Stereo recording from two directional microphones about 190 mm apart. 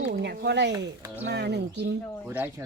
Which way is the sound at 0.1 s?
60° right (ahead or behind).